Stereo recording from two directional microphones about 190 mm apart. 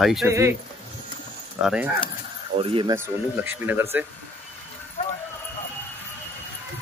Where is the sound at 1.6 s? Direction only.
5° right (ahead or behind).